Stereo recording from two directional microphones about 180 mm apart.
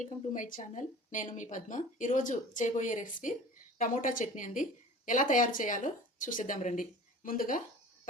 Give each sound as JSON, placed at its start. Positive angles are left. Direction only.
{"t": 0.0, "sound": "speech", "side_deg": 45}